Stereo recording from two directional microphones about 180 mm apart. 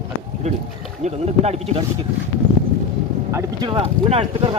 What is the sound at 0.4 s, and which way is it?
Speech, 40° right (ahead or behind).